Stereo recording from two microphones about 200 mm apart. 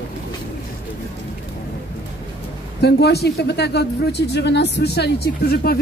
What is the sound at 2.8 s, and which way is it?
Speech, 55° left (ahead or behind).